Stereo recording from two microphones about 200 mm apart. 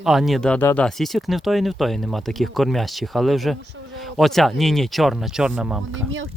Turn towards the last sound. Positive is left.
turn(degrees=-75)  # may be behind; listen again after turning